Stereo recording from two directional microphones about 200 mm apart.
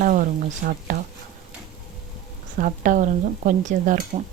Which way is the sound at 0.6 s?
45° right (ahead or behind).